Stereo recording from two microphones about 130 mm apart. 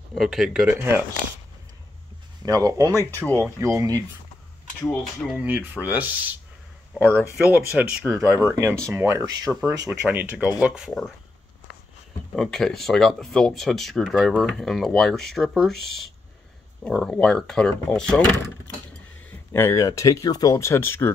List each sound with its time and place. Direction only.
0.1 s speech: centre (ahead or behind)
2.4 s speech: 25° right (ahead or behind)
2.9 s speech: 20° left (ahead or behind)
3.4 s speech: 20° right (ahead or behind)
4.8 s speech: 5° left (ahead or behind)
5.4 s speech: 15° right (ahead or behind)
9.8 s speech: 10° right (ahead or behind)
12.4 s speech: 5° left (ahead or behind)
19.5 s speech: 20° left (ahead or behind)